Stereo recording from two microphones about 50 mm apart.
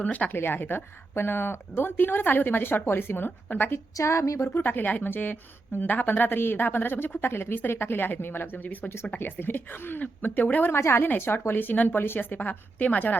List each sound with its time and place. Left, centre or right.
0.0 s speech: left
0.3 s a woman's voice: left
4.0 s a woman's voice: left
4.4 s a woman's voice: left
10.8 s a woman's voice: left
11.4 s a woman's voice: left
11.9 s a woman's voice: left